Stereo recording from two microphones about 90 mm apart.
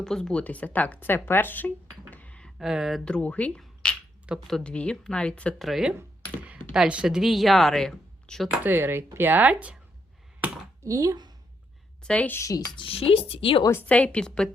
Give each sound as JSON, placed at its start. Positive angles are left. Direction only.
{"t": 0.0, "sound": "speech", "side_deg": 5}
{"t": 2.6, "sound": "speech", "side_deg": -5}
{"t": 3.0, "sound": "speech", "side_deg": 10}
{"t": 5.5, "sound": "speech", "side_deg": 0}
{"t": 6.4, "sound": "speech", "side_deg": -15}
{"t": 8.6, "sound": "speech", "side_deg": -25}
{"t": 10.8, "sound": "speech", "side_deg": -40}
{"t": 12.0, "sound": "speech", "side_deg": 15}
{"t": 12.4, "sound": "speech", "side_deg": 40}
{"t": 12.7, "sound": "speech", "side_deg": 80}
{"t": 13.8, "sound": "speech", "side_deg": 15}